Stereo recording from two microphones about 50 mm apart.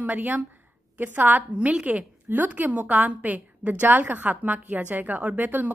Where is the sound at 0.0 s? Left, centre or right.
Right.